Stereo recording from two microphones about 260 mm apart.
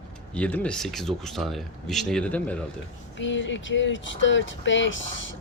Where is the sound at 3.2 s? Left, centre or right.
Left.